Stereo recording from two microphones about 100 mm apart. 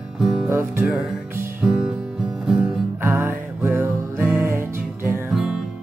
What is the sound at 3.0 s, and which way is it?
Music, 25° right (ahead or behind).